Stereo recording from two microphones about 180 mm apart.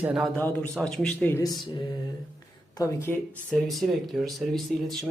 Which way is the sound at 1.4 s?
20° left (ahead or behind).